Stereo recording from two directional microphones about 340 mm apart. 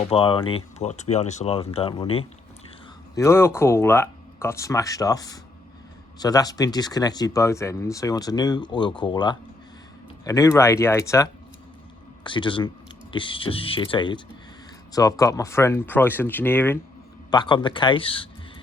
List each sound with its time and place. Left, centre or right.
0.0 s speech: centre